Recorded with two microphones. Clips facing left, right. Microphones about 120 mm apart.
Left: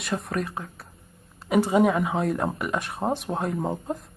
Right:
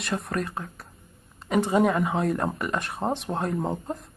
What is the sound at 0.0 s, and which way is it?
Speech, centre (ahead or behind).